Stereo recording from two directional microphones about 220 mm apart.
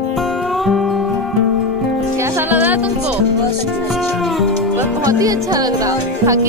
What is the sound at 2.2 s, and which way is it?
Music, 10° right (ahead or behind).